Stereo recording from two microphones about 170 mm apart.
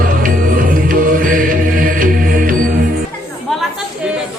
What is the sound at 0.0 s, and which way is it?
Music, 55° right (ahead or behind).